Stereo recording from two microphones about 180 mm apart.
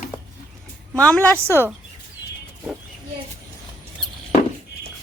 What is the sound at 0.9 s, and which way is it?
Speech, 10° left (ahead or behind).